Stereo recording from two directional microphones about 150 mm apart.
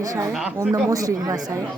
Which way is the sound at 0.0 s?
25° right (ahead or behind).